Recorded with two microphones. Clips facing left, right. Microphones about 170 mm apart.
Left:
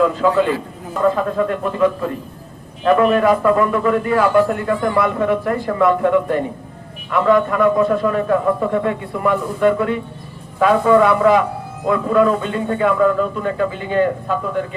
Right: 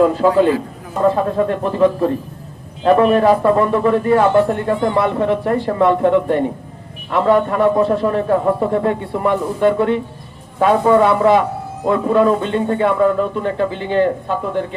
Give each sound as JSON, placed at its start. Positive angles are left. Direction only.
{"t": 0.0, "sound": "a man's voice", "side_deg": -35}